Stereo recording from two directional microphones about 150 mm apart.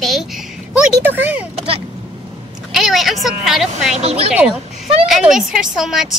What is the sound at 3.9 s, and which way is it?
Speech, 40° right (ahead or behind).